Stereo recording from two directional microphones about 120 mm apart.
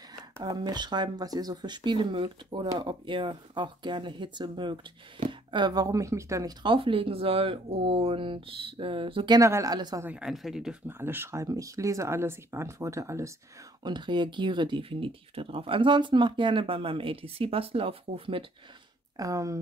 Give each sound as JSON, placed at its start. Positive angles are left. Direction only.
{"t": 0.4, "sound": "speech", "side_deg": -35}
{"t": 6.6, "sound": "speech", "side_deg": -45}
{"t": 9.4, "sound": "speech", "side_deg": -25}
{"t": 10.0, "sound": "speech", "side_deg": -5}
{"t": 10.9, "sound": "speech", "side_deg": -20}
{"t": 13.8, "sound": "speech", "side_deg": -40}
{"t": 19.1, "sound": "speech", "side_deg": -30}